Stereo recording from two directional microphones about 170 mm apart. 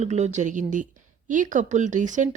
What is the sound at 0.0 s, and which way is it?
Speech, 45° right (ahead or behind).